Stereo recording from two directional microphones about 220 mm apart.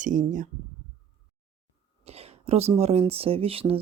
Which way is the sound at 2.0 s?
30° right (ahead or behind).